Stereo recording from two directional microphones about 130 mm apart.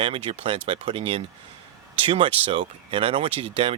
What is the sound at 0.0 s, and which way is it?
Speech, 45° right (ahead or behind).